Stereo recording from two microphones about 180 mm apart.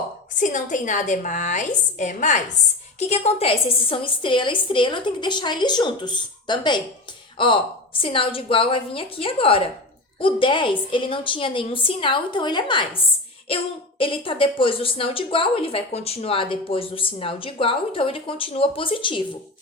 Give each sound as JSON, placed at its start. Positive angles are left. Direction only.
{"t": 0.3, "sound": "a woman's voice", "side_deg": 45}